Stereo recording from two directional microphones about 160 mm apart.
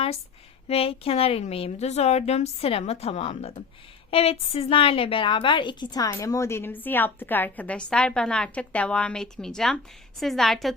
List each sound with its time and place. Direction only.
0.7 s a woman's voice: 35° left (ahead or behind); by 10.8 s centre (ahead or behind)